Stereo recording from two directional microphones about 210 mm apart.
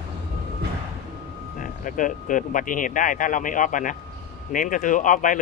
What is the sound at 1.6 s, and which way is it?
Speech, 40° left (ahead or behind).